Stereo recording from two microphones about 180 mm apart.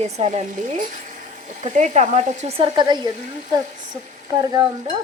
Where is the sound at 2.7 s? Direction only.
25° right (ahead or behind).